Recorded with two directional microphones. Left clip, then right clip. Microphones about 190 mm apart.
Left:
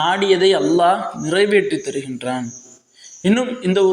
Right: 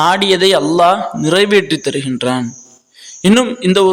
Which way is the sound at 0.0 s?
40° right (ahead or behind).